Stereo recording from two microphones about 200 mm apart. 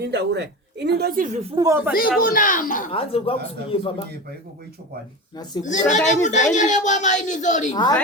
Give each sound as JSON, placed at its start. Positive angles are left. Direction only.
{"t": 0.0, "sound": "a woman's voice", "side_deg": -55}
{"t": 1.5, "sound": "speech", "side_deg": -15}
{"t": 2.0, "sound": "a woman's voice", "side_deg": 45}
{"t": 2.9, "sound": "speech", "side_deg": 30}
{"t": 5.6, "sound": "a woman's voice", "side_deg": 35}